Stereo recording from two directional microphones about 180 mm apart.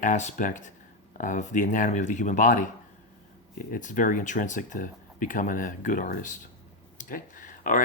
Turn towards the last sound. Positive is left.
turn(degrees=45)  # may be behind; listen again after turning